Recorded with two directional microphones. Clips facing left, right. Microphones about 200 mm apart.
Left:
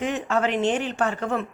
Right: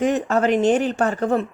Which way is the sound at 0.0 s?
40° right (ahead or behind).